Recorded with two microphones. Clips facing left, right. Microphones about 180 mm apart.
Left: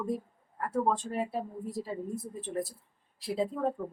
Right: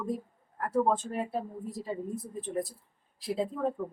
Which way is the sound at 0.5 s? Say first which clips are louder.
Right 2 dB; centre (ahead or behind).